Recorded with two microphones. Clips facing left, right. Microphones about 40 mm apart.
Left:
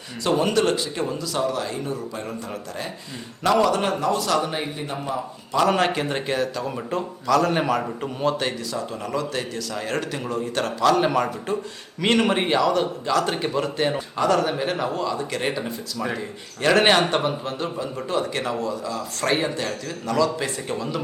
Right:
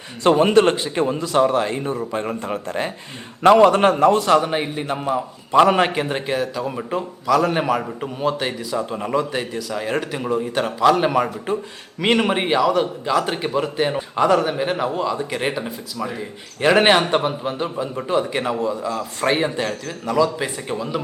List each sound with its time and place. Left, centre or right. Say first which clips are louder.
0.2 s a man's voice: right 6 dB; right; by 8.8 s centre
8.8 s a man's voice: right 7 dB; right